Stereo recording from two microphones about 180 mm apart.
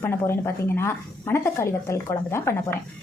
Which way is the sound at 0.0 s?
15° left (ahead or behind).